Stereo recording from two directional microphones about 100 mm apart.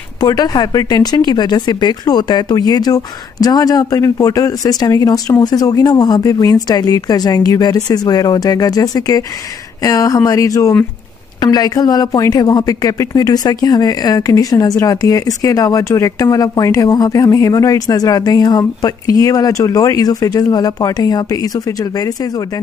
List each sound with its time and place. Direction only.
0.2 s speech: 40° left (ahead or behind)